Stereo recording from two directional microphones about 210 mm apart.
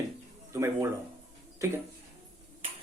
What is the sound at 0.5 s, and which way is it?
Speech, 15° right (ahead or behind).